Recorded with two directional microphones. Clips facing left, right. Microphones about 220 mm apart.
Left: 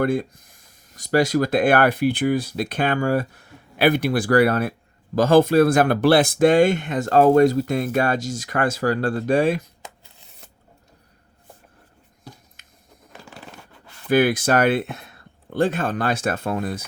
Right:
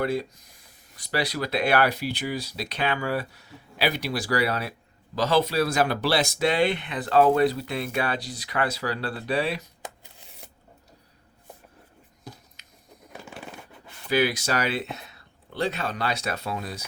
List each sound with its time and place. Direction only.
0.0 s speech: 50° left (ahead or behind)
10.0 s scissors: 15° right (ahead or behind)
12.6 s a sound: 50° left (ahead or behind)
14.1 s speech: 50° left (ahead or behind)